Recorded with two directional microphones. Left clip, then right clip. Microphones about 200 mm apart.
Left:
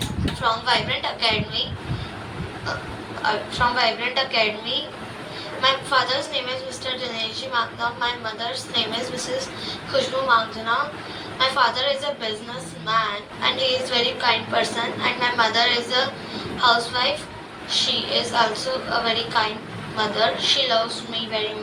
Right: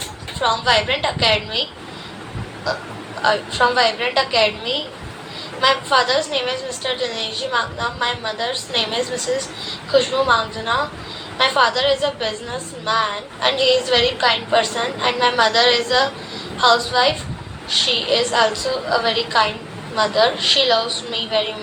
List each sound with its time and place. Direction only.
0.4 s a woman's voice: 40° right (ahead or behind)
3.2 s a woman's voice: 40° right (ahead or behind)